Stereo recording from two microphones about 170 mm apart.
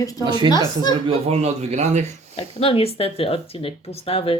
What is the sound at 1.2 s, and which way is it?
Speech, 40° right (ahead or behind).